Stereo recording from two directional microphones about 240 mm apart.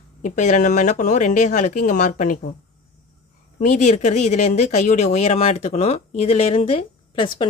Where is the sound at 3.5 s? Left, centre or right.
Left.